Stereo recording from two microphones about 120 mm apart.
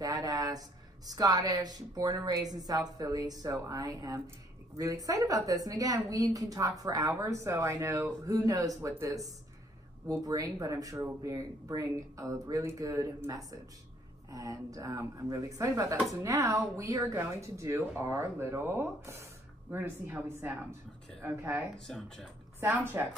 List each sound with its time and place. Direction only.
0.0 s a woman's voice: 30° right (ahead or behind)
21.7 s speech: 5° left (ahead or behind)
22.6 s a woman's voice: 20° right (ahead or behind)